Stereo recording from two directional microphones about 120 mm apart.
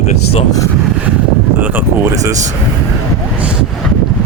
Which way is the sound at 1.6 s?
20° right (ahead or behind).